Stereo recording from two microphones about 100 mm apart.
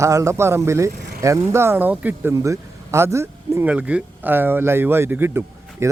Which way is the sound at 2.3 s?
30° right (ahead or behind).